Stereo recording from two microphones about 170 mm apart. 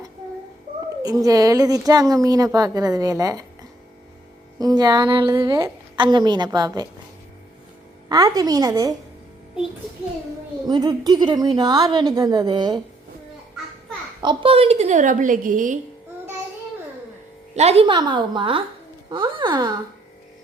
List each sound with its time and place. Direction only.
1.0 s a woman's voice: 20° right (ahead or behind)
8.1 s a woman's voice: 20° right (ahead or behind)
10.7 s a woman's voice: 25° right (ahead or behind)
14.2 s a woman's voice: 30° right (ahead or behind); by 15.8 s 50° right (ahead or behind)
17.5 s a woman's voice: 40° right (ahead or behind)